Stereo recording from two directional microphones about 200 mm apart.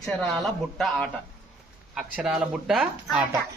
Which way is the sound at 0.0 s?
Centre (ahead or behind).